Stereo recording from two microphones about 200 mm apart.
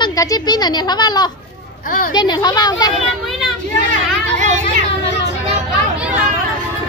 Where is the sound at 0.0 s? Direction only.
15° left (ahead or behind).